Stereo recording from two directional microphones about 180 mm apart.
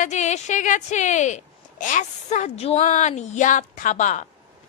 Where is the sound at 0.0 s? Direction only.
40° left (ahead or behind).